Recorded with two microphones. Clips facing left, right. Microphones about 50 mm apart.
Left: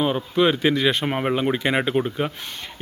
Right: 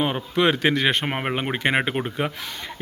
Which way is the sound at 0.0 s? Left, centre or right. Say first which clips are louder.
Left 1 dB; right.